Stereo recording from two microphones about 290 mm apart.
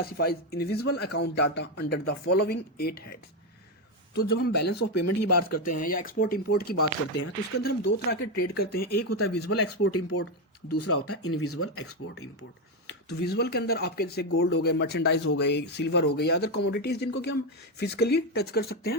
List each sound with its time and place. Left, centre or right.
0.0 s speech: left
4.8 s speech: left
5.8 s speech: left
7.9 s speech: left
9.0 s speech: left
13.1 s speech: left